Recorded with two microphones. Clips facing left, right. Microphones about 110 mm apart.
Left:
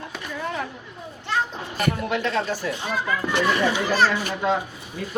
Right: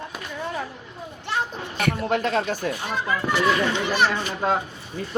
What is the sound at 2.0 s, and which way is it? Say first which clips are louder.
Speech: right 2 dB; 40° right (ahead or behind).